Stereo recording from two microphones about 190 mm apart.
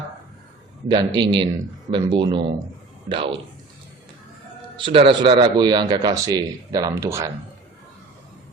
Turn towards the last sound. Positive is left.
turn(degrees=-15)  # may be behind; listen again after turning